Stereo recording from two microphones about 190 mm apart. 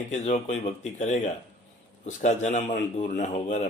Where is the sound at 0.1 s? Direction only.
40° left (ahead or behind).